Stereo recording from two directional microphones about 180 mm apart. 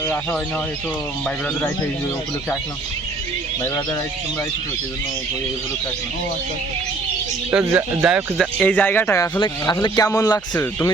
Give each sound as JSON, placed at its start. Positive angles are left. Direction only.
{"t": 7.5, "sound": "speech", "side_deg": -10}
{"t": 8.5, "sound": "a man's voice", "side_deg": 10}